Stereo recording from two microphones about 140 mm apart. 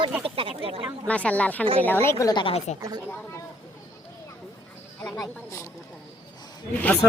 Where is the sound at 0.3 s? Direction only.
40° right (ahead or behind).